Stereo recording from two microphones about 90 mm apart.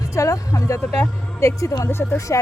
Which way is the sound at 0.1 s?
35° left (ahead or behind).